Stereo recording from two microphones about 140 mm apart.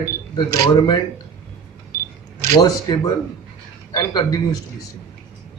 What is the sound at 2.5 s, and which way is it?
Speech, 25° left (ahead or behind).